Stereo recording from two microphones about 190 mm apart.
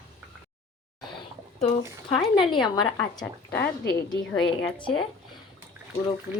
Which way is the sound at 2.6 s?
20° left (ahead or behind).